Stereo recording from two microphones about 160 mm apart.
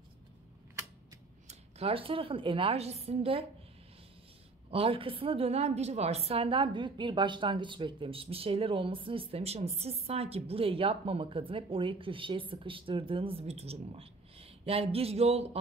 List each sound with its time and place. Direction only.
1.5 s a woman's voice: 40° right (ahead or behind)
4.6 s a woman's voice: 35° right (ahead or behind)